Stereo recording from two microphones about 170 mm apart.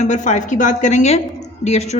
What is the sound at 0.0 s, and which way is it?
A woman's voice, 45° left (ahead or behind).